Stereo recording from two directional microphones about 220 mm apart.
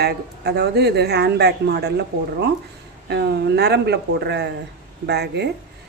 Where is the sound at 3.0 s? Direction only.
50° right (ahead or behind).